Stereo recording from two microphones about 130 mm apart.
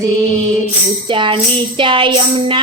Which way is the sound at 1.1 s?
40° right (ahead or behind).